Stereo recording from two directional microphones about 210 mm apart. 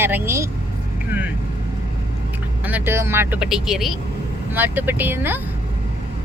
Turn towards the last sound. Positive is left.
turn(degrees=-10)  # may be behind; listen again after turning